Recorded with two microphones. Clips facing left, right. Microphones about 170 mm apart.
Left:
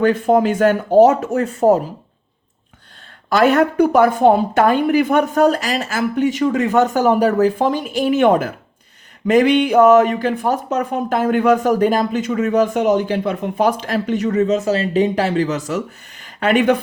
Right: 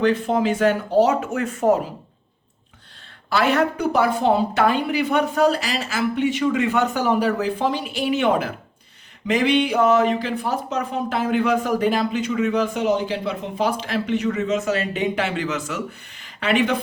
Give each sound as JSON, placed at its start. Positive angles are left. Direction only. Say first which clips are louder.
{"t": 0.0, "sound": "speech", "louder": "left 5 dB", "side_deg": 50}
{"t": 3.2, "sound": "speech", "louder": "left 5 dB", "side_deg": 45}
{"t": 16.2, "sound": "a sound", "louder": "left 6 dB", "side_deg": 45}